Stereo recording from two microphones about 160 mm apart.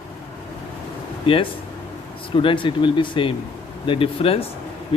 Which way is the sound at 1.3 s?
30° left (ahead or behind).